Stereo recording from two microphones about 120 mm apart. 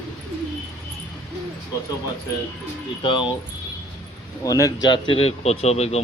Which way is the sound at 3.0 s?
45° left (ahead or behind).